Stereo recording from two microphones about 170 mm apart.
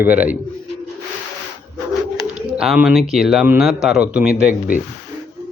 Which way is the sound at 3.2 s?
Centre (ahead or behind).